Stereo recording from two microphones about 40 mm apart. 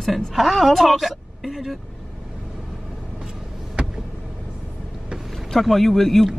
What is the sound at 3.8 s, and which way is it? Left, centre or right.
Vehicle, right.